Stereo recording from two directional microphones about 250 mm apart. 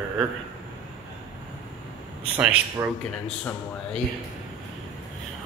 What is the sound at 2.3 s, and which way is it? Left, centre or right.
Speech, centre.